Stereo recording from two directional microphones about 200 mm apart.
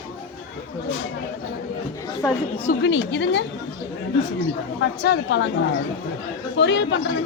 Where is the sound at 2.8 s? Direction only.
60° left (ahead or behind).